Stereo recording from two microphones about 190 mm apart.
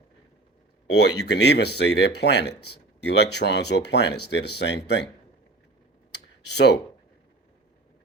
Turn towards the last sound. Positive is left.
turn(degrees=65)  # may be behind; listen again after turning